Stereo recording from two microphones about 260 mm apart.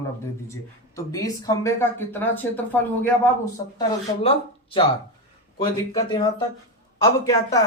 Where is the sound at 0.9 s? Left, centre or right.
Centre.